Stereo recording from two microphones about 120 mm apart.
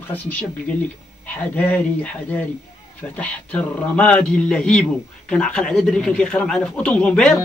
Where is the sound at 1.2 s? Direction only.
10° left (ahead or behind).